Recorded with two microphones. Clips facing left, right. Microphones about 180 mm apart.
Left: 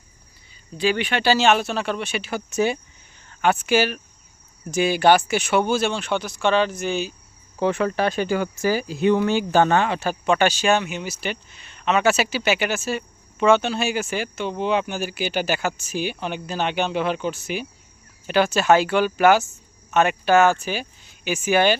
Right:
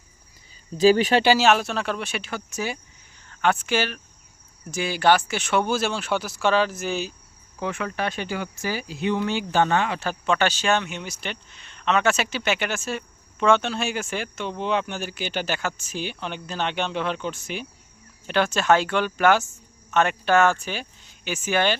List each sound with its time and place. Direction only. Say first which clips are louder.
0.8 s speech: right 5 dB; 40° right (ahead or behind)
1.4 s speech: left 1 dB; centre (ahead or behind)
2.5 s speech: left 9 dB; 25° left (ahead or behind)
3.2 s speech: left 3 dB; 10° left (ahead or behind)
7.6 s speech: left 7 dB; 35° left (ahead or behind)
10.0 s speech: left 3 dB; 15° left (ahead or behind)